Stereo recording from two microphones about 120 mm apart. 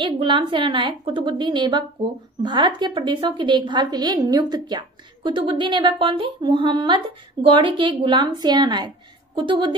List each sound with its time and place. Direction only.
0.0 s a woman's voice: 40° right (ahead or behind)